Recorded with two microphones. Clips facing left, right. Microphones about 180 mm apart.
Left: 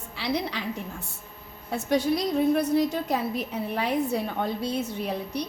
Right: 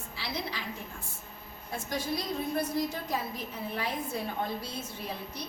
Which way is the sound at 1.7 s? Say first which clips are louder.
Left 9 dB; 70° left (ahead or behind).